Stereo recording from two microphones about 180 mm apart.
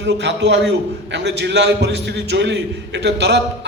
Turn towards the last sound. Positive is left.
turn(degrees=-75)  # may be behind; listen again after turning